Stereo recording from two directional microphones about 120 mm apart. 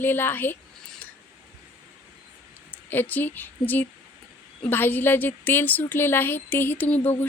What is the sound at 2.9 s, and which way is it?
Speech, 15° left (ahead or behind).